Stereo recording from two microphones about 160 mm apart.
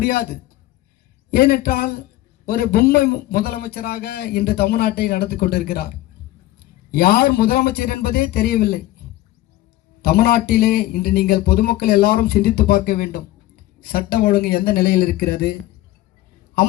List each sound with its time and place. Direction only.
0.0 s a man's voice: 65° left (ahead or behind)
1.3 s a man's voice: 75° left (ahead or behind)
10.0 s a man's voice: 70° left (ahead or behind)